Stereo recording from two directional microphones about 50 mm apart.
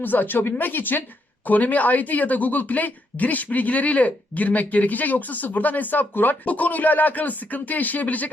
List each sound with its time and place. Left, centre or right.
0.0 s speech: left